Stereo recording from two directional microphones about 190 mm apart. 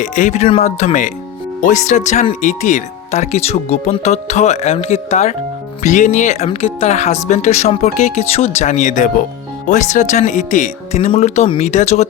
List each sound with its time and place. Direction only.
0.0 s speech: 40° left (ahead or behind)